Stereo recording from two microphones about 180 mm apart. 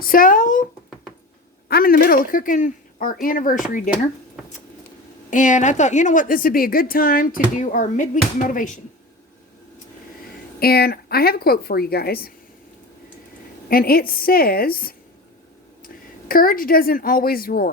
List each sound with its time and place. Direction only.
0.0 s a sound: 50° left (ahead or behind)
1.6 s speech: 55° left (ahead or behind)
5.3 s a woman's voice: 45° left (ahead or behind)
10.6 s speech: 60° left (ahead or behind)
13.7 s speech: 55° left (ahead or behind)
16.3 s a woman's voice: 50° left (ahead or behind)